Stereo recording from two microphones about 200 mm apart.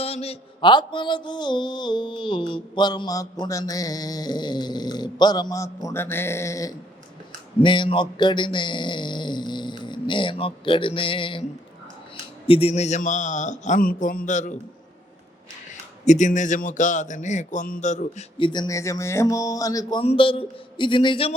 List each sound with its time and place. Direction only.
0.0 s mantra: 30° left (ahead or behind)
8.5 s speech: 25° left (ahead or behind)
12.5 s a man's voice: 30° left (ahead or behind)
16.0 s a man's voice: 35° left (ahead or behind)
18.3 s mantra: 25° left (ahead or behind)